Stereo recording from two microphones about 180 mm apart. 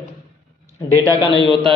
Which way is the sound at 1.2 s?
25° left (ahead or behind).